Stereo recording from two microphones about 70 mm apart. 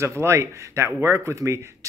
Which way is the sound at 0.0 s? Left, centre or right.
Right.